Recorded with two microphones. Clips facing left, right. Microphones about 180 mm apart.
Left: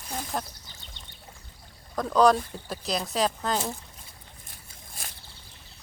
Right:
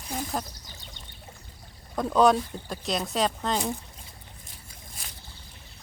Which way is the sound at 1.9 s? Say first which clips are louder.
Even; 5° right (ahead or behind).